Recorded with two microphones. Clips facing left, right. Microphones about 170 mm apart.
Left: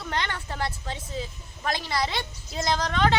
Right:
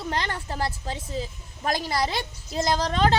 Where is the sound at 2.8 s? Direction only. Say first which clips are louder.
Right 1 dB; 35° right (ahead or behind).